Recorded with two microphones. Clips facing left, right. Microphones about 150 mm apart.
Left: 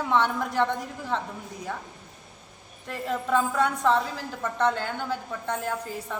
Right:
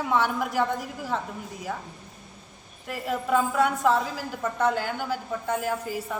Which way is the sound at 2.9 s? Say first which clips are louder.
Right 1 dB; 10° right (ahead or behind).